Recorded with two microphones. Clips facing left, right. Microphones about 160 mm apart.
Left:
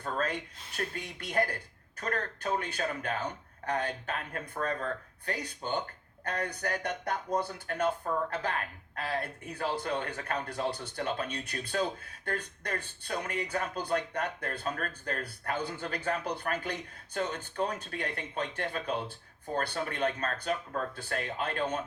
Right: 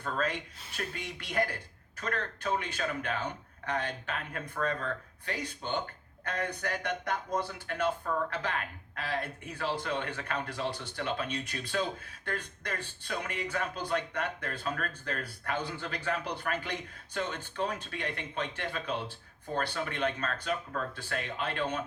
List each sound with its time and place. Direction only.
0.0 s speech: 45° left (ahead or behind)